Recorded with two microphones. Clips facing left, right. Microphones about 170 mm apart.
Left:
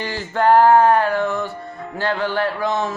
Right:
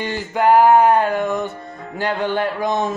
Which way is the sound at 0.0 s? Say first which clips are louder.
Right 1 dB; 15° right (ahead or behind).